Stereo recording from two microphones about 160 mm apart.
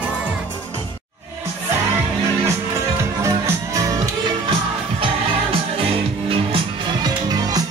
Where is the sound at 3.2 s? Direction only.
20° right (ahead or behind).